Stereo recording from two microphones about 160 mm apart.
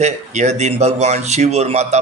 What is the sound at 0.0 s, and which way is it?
Speech, 45° right (ahead or behind).